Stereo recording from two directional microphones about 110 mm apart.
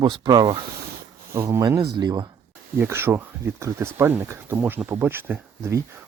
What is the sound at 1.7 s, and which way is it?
Speech, 40° right (ahead or behind).